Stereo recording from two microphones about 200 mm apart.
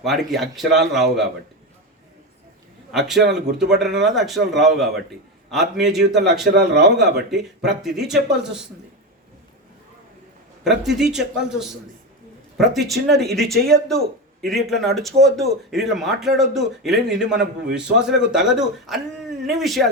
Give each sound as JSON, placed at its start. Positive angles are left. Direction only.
{"t": 0.0, "sound": "speech", "side_deg": 0}
{"t": 3.2, "sound": "a man's voice", "side_deg": -55}
{"t": 3.6, "sound": "speech", "side_deg": 0}
{"t": 6.4, "sound": "a man's voice", "side_deg": -55}
{"t": 6.9, "sound": "speech", "side_deg": 0}
{"t": 10.6, "sound": "speech", "side_deg": 0}